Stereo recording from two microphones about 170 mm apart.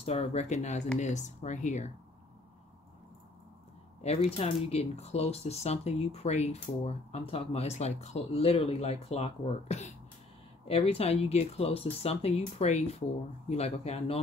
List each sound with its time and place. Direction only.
0.0 s speech: 40° left (ahead or behind)
4.0 s speech: 40° left (ahead or behind)